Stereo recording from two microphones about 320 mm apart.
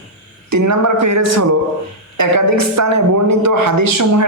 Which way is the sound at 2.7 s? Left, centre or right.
Right.